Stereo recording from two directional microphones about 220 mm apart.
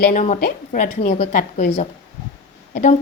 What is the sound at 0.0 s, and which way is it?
A woman's voice, 35° left (ahead or behind).